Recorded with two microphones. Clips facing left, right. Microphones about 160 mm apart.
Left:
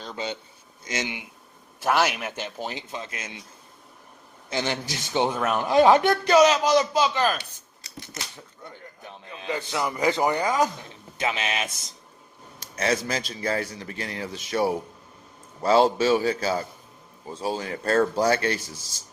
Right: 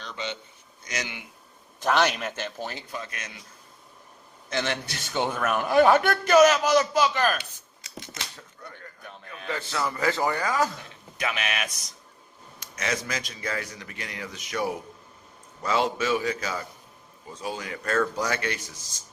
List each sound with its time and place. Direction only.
0.1 s a man's voice: 35° left (ahead or behind)
0.9 s a man's voice: 20° left (ahead or behind)
1.8 s a man's voice: 10° left (ahead or behind)
4.4 s a man's voice: 30° left (ahead or behind)
4.9 s a man's voice: 20° left (ahead or behind)
7.9 s a sound: 20° right (ahead or behind)
8.6 s a man's voice: 20° left (ahead or behind)